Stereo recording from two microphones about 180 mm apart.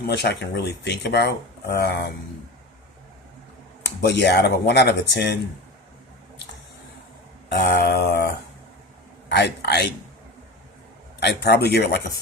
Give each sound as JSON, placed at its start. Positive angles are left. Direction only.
{"t": 0.0, "sound": "speech", "side_deg": 65}
{"t": 4.0, "sound": "speech", "side_deg": 70}
{"t": 7.5, "sound": "speech", "side_deg": 65}
{"t": 9.3, "sound": "speech", "side_deg": 65}
{"t": 11.2, "sound": "speech", "side_deg": 65}